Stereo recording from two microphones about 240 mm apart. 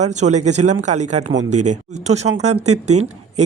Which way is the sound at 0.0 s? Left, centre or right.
Right.